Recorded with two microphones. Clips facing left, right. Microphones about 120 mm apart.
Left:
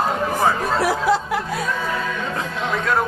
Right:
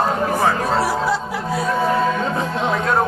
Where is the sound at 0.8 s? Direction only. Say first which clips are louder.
Left 1 dB; 55° left (ahead or behind).